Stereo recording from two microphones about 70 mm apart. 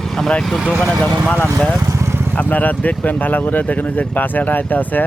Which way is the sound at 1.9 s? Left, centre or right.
Right.